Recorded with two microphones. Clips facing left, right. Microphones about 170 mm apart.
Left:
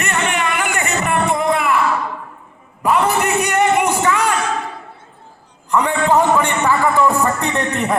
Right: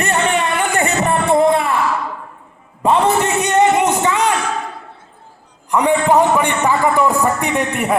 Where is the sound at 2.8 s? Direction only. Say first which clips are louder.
Right 2 dB; 25° right (ahead or behind).